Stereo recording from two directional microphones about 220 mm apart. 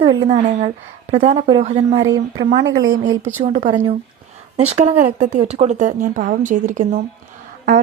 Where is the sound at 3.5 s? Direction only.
35° right (ahead or behind).